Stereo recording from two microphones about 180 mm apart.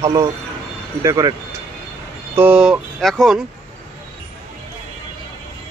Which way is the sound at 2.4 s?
5° right (ahead or behind).